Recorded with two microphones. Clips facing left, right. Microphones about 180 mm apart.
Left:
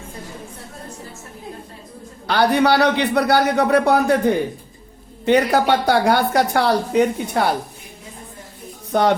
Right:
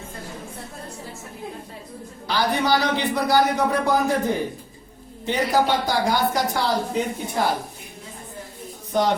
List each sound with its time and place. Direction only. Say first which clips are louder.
2.2 s a man's voice: left 6 dB; 65° left (ahead or behind)
8.9 s speech: left 4 dB; 60° left (ahead or behind)